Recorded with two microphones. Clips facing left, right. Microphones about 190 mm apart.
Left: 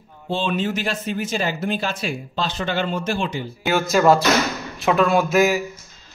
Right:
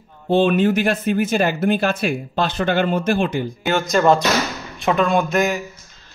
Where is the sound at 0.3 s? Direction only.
55° right (ahead or behind).